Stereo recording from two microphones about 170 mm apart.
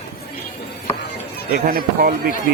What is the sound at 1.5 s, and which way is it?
Speech, 55° right (ahead or behind).